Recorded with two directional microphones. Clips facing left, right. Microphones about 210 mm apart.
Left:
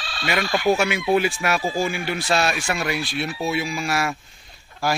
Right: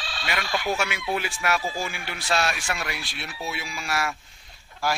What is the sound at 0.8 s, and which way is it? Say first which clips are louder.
Speech: left 8 dB; 15° left (ahead or behind).